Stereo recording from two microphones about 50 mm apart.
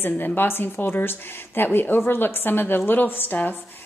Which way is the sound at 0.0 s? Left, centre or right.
Left.